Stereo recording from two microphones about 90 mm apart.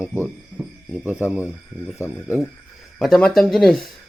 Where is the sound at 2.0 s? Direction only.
30° left (ahead or behind).